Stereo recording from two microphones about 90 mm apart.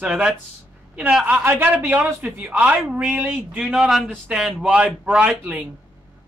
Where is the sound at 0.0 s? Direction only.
10° right (ahead or behind).